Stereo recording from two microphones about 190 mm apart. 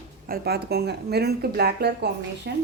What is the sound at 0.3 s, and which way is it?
A woman's voice, 55° right (ahead or behind).